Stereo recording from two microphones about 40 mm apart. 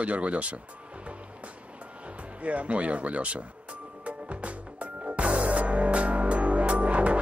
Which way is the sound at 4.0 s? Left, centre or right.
Right.